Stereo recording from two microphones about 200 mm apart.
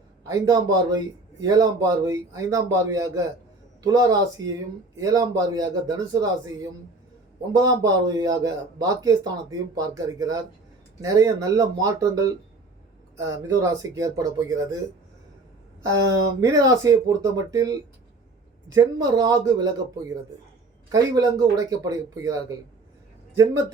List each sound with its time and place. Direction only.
0.3 s a man's voice: 15° right (ahead or behind)
16.4 s a man's voice: 15° right (ahead or behind)
20.9 s a man's voice: 20° right (ahead or behind)